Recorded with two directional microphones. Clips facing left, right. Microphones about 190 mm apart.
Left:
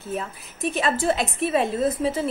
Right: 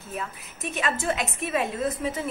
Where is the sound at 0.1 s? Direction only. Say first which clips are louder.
Left 5 dB; 35° left (ahead or behind).